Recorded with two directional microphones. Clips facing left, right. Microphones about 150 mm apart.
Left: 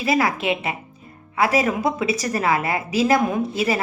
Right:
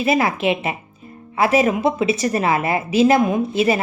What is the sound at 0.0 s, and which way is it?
Speech, 25° right (ahead or behind).